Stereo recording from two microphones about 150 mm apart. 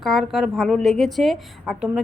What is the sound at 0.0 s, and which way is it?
A woman's voice, centre (ahead or behind).